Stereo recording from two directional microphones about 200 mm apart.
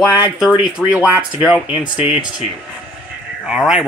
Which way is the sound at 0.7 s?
5° right (ahead or behind).